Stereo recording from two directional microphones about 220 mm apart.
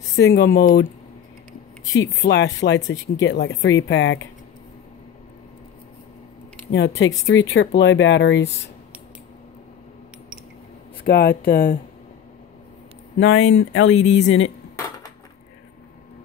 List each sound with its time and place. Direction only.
0.1 s speech: 50° left (ahead or behind)
1.9 s speech: 55° left (ahead or behind)
6.7 s speech: 55° left (ahead or behind)
11.1 s speech: 45° left (ahead or behind)
13.2 s speech: 65° left (ahead or behind)
13.9 s speech: 30° left (ahead or behind)
14.2 s speech: 60° left (ahead or behind)